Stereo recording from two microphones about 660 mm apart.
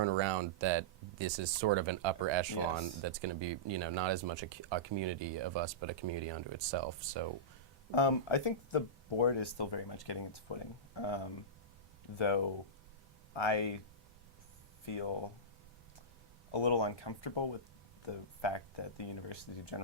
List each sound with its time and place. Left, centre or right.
0.0 s speech: right
8.0 s speech: left
14.9 s speech: left
16.5 s speech: left